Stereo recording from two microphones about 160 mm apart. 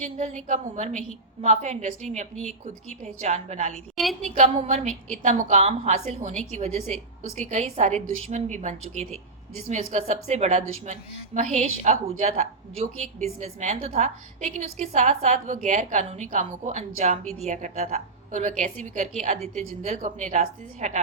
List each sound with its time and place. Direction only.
0.0 s a woman's voice: 50° right (ahead or behind)
3.9 s a sound: centre (ahead or behind)
4.2 s a woman's voice: 50° right (ahead or behind)